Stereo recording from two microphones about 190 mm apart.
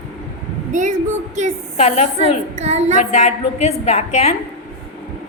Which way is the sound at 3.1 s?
35° left (ahead or behind).